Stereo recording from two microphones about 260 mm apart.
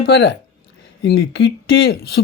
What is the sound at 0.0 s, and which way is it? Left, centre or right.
Speech, left.